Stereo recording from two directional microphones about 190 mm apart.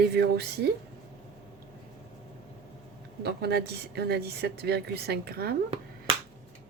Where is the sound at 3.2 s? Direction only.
60° right (ahead or behind).